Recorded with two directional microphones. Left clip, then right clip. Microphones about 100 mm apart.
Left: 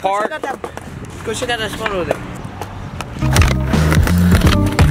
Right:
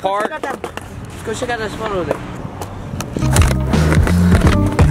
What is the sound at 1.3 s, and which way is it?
Speech, 20° left (ahead or behind).